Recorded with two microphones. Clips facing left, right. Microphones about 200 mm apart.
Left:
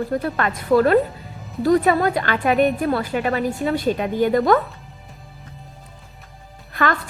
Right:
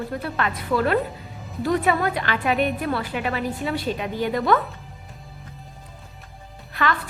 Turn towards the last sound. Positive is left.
turn(degrees=45)  # may be behind; listen again after turning